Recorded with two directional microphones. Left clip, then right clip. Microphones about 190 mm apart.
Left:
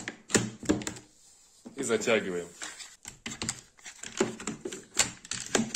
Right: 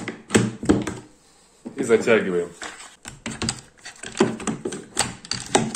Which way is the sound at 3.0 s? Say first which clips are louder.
Right 9 dB; 5° right (ahead or behind).